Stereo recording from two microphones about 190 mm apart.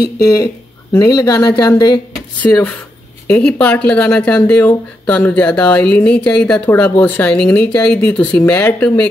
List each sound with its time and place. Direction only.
0.9 s speech: 20° left (ahead or behind)